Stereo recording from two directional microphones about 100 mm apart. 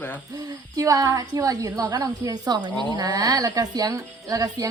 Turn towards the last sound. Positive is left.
turn(degrees=-35)  # may be behind; listen again after turning